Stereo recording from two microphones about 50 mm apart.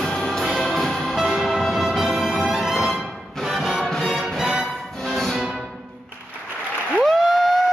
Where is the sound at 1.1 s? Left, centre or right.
Centre.